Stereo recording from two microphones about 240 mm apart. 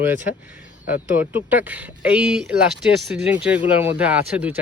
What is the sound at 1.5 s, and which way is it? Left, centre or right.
Speech, centre.